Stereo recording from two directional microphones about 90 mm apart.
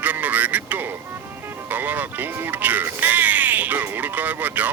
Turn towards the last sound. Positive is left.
turn(degrees=-20)  # may be behind; listen again after turning